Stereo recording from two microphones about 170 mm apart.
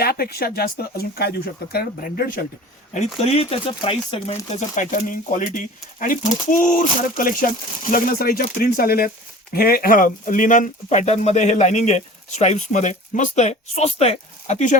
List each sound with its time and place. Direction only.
0.0 s speech: 65° left (ahead or behind)
2.9 s speech: 40° left (ahead or behind)